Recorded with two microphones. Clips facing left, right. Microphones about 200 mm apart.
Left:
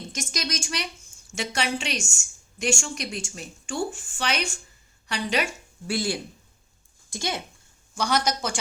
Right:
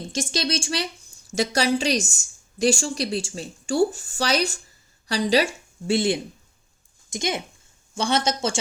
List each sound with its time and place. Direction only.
0.1 s a woman's voice: 30° right (ahead or behind)